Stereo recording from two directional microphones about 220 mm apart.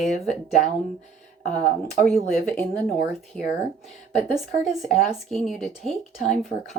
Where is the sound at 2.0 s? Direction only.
5° left (ahead or behind).